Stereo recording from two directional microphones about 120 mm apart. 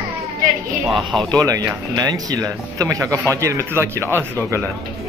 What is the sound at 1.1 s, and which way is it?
Speech, 5° left (ahead or behind).